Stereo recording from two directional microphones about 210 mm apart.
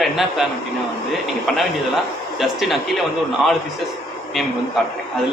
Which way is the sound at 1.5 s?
Centre (ahead or behind).